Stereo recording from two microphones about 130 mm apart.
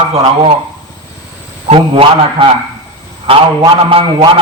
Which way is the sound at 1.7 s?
45° right (ahead or behind).